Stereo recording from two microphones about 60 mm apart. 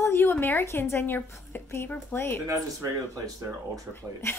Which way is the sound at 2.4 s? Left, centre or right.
Right.